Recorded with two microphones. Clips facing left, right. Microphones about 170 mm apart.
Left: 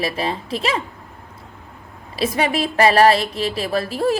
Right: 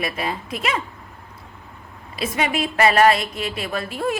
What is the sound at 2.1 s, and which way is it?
A woman's voice, 35° left (ahead or behind).